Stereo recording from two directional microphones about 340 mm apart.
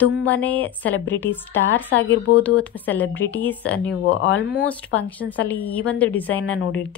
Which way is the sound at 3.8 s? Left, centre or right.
Left.